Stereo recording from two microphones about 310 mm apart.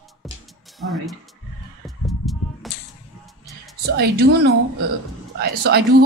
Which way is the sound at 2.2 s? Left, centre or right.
Centre.